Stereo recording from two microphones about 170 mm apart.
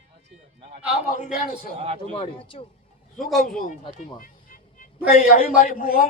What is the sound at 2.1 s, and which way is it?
Speech, 30° left (ahead or behind).